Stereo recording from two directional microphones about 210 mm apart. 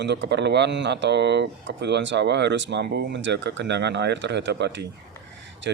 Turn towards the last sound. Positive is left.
turn(degrees=-55)  # may be behind; listen again after turning